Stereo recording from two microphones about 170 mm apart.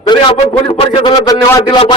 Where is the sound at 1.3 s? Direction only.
20° left (ahead or behind).